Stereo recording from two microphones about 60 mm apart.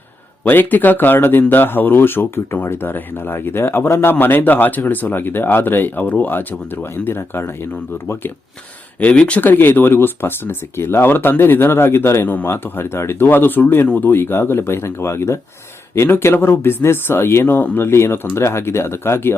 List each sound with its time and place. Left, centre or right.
0.4 s speech: left
9.0 s speech: left
9.4 s speech: left